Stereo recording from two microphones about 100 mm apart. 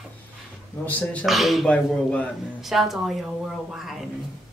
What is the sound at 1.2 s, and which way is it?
Speech, centre (ahead or behind).